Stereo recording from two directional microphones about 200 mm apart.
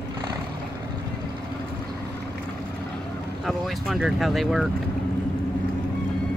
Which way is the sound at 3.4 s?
Centre (ahead or behind).